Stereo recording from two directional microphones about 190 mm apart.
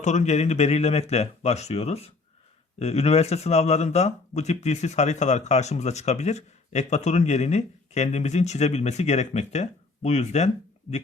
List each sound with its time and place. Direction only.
0.0 s speech: 40° left (ahead or behind)